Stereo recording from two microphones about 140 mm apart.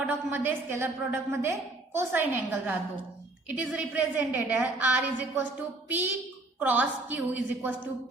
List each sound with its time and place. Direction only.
0.1 s a woman's voice: 15° right (ahead or behind)